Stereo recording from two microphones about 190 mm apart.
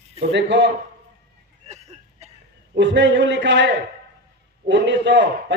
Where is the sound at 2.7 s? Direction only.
65° right (ahead or behind).